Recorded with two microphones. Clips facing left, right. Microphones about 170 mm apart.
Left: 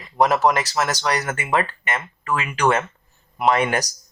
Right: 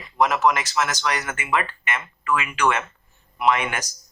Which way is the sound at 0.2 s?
35° left (ahead or behind).